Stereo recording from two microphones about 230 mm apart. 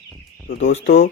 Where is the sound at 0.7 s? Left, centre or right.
Left.